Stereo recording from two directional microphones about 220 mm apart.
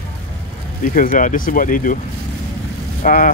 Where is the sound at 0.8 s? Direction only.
40° left (ahead or behind).